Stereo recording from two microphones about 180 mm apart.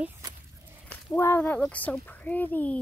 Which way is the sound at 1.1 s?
10° left (ahead or behind).